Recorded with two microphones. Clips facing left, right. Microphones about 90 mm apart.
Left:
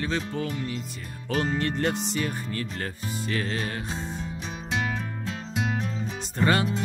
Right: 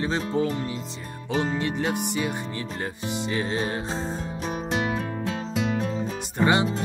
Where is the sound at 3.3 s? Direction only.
20° right (ahead or behind).